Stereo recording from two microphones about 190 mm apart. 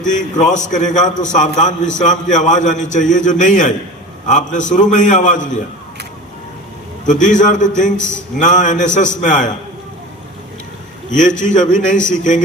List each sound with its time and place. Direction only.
0.0 s a man's voice: 40° left (ahead or behind)
7.1 s a man's voice: 40° left (ahead or behind)
11.1 s a man's voice: 40° left (ahead or behind)